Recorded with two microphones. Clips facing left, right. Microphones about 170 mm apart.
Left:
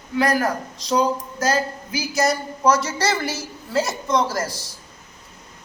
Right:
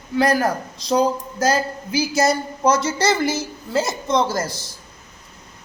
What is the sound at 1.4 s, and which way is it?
A woman's voice, 30° right (ahead or behind).